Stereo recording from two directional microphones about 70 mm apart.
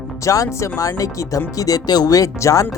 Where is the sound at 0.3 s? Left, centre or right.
Left.